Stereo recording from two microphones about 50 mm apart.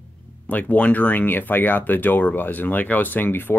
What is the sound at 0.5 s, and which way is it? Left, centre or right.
Speech, left.